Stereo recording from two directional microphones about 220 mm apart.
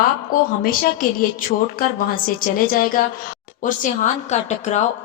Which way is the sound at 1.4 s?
40° left (ahead or behind).